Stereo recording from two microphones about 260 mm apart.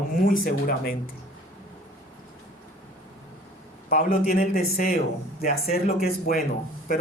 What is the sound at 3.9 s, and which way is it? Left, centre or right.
Speech, left.